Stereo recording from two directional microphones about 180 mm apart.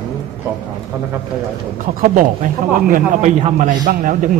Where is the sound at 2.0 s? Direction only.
45° right (ahead or behind).